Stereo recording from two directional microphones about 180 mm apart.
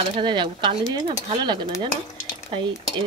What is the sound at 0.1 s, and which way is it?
Speech, 25° right (ahead or behind).